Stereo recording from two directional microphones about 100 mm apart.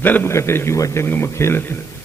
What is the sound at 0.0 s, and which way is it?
A man's voice, 20° left (ahead or behind).